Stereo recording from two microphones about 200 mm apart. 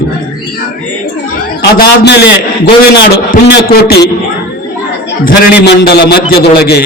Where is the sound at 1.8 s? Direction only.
55° left (ahead or behind).